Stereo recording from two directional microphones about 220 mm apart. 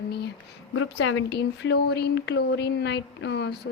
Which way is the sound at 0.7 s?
65° left (ahead or behind).